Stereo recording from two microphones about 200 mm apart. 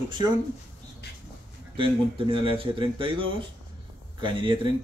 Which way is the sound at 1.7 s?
25° right (ahead or behind).